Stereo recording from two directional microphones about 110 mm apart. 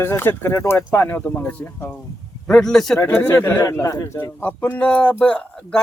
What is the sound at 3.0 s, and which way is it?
Speech, 20° left (ahead or behind).